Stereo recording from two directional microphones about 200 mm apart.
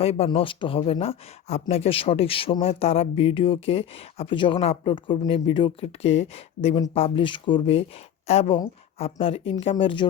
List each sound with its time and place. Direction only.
0.0 s speech: 30° left (ahead or behind)